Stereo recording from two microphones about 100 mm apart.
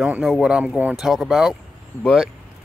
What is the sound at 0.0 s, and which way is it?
Speech, 5° right (ahead or behind).